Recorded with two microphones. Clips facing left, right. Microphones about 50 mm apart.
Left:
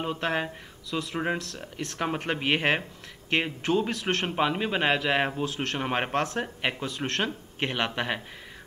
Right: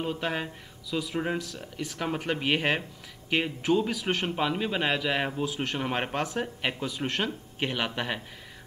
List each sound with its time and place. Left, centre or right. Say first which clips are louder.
0.0 s speech: left 2 dB; centre
0.8 s speech: even; centre
1.1 s speech: left 1 dB; centre
3.9 s speech: left 1 dB; centre
4.3 s speech: left 2 dB; centre
5.4 s speech: even; centre
5.8 s speech: left 3 dB; centre